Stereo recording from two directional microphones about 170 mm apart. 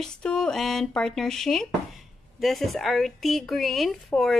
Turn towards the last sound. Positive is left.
turn(degrees=0)  # may be behind; listen again after turning